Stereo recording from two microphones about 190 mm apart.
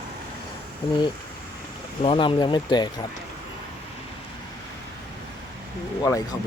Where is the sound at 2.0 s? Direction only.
30° left (ahead or behind).